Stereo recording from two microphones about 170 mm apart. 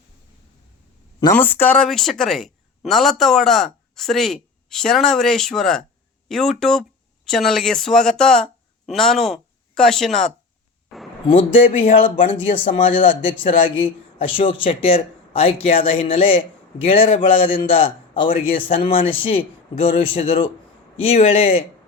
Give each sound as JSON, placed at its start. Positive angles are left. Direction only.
{"t": 1.3, "sound": "speech", "side_deg": 10}
{"t": 10.8, "sound": "a sound", "side_deg": 0}
{"t": 11.3, "sound": "a man's voice", "side_deg": 35}
{"t": 18.3, "sound": "a man's voice", "side_deg": 55}
{"t": 18.7, "sound": "speech", "side_deg": 30}